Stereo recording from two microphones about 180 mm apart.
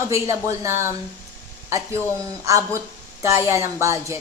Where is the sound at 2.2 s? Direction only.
15° right (ahead or behind).